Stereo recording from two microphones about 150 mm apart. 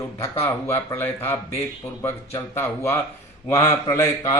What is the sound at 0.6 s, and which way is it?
Speech, 15° left (ahead or behind).